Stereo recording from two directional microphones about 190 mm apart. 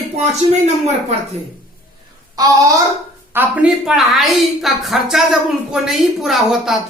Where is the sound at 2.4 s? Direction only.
20° right (ahead or behind).